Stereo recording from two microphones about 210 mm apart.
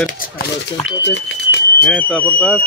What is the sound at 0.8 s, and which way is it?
Smoke detector, 55° left (ahead or behind).